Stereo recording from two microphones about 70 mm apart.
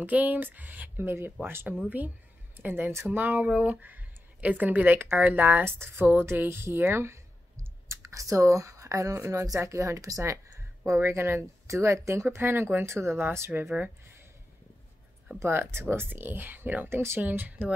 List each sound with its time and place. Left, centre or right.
0.0 s speech: right
13.7 s a sound: right
15.3 s speech: right